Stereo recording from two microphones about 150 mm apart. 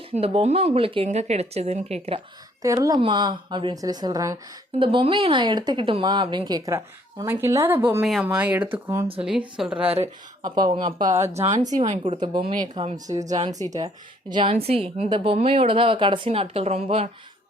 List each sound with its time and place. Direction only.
0.1 s speech: 45° right (ahead or behind)
2.6 s a woman's voice: 20° right (ahead or behind)
4.8 s speech: 35° right (ahead or behind); by 7.8 s 15° right (ahead or behind)
8.0 s speech: 5° right (ahead or behind)
9.2 s speech: 5° right (ahead or behind)
10.4 s a woman's voice: 25° right (ahead or behind)
10.8 s speech: 60° right (ahead or behind)
11.3 s speech: 50° right (ahead or behind); by 12.8 s 30° right (ahead or behind)
13.2 s speech: 50° right (ahead or behind)
13.7 s speech: 25° right (ahead or behind); by 17.1 s 45° right (ahead or behind)